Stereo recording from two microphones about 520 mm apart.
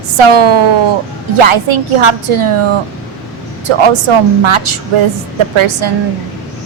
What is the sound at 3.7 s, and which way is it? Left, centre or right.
A woman's voice, right.